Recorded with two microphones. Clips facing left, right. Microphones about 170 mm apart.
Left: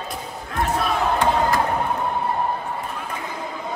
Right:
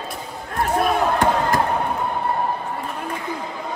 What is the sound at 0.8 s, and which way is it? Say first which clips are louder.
Crowd: right 2 dB; 45° right (ahead or behind).